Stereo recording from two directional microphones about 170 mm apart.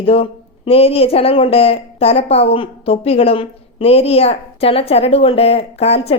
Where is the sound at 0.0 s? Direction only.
35° left (ahead or behind).